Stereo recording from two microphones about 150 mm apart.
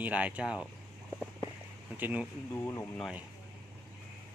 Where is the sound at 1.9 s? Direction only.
10° right (ahead or behind).